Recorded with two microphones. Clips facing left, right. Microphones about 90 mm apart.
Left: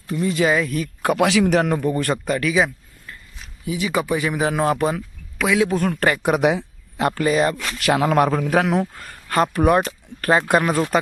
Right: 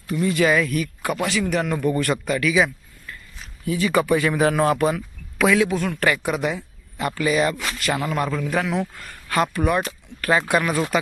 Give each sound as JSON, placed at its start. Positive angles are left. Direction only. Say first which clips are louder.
{"t": 0.1, "sound": "speech", "louder": "even", "side_deg": 25}
{"t": 1.2, "sound": "speech", "louder": "left 6 dB", "side_deg": 80}
{"t": 1.8, "sound": "speech", "louder": "even", "side_deg": 30}
{"t": 3.7, "sound": "a man's voice", "louder": "right 2 dB", "side_deg": 15}
{"t": 5.6, "sound": "speech", "louder": "left 2 dB", "side_deg": 40}
{"t": 6.2, "sound": "speech", "louder": "left 6 dB", "side_deg": 65}
{"t": 7.5, "sound": "speech", "louder": "even", "side_deg": -5}
{"t": 7.8, "sound": "a man's voice", "louder": "left 9 dB", "side_deg": 65}
{"t": 8.4, "sound": "a man's voice", "louder": "left 4 dB", "side_deg": 55}
{"t": 8.8, "sound": "speech", "louder": "left 2 dB", "side_deg": 35}
{"t": 9.5, "sound": "speech", "louder": "left 5 dB", "side_deg": 50}